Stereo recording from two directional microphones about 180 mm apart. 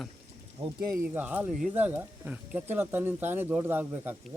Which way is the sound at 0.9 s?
10° right (ahead or behind).